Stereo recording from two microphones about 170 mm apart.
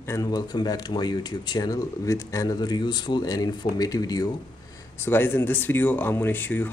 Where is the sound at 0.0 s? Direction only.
20° left (ahead or behind).